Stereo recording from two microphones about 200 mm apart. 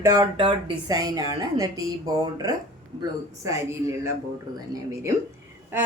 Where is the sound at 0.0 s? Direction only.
20° right (ahead or behind).